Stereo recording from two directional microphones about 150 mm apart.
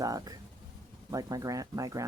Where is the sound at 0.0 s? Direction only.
25° right (ahead or behind).